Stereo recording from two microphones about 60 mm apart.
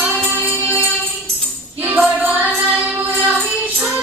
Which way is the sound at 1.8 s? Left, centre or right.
Right.